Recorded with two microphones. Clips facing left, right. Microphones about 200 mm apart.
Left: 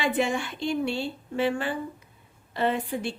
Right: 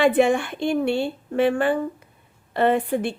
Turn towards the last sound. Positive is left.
turn(degrees=-55)  # may be behind; listen again after turning